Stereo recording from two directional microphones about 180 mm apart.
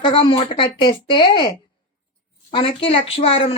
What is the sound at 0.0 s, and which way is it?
Speech, 30° left (ahead or behind).